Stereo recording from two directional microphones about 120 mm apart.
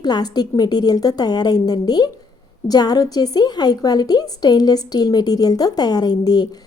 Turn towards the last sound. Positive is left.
turn(degrees=35)  # may be behind; listen again after turning